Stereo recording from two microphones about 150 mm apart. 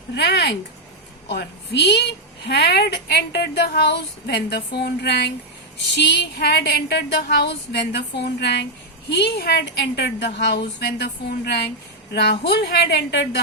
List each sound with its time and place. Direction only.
0.2 s a woman's voice: 90° left
6.3 s a woman's voice: 90° left